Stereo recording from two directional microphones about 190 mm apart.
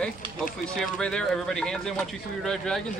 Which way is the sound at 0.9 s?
5° left (ahead or behind).